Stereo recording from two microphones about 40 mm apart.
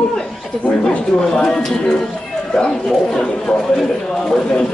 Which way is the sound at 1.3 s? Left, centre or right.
Left.